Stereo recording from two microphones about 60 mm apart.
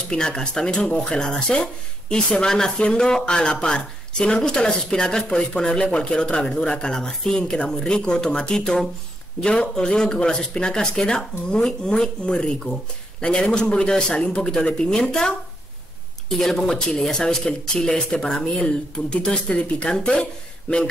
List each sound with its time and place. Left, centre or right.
0.1 s speech: centre
18.6 s speech: left